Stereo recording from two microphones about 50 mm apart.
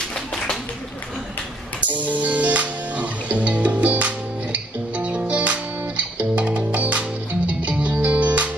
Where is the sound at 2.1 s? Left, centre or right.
Right.